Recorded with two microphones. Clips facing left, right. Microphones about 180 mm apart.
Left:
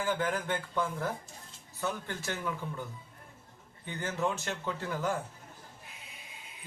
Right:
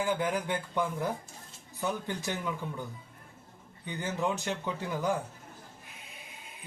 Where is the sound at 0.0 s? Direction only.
15° right (ahead or behind).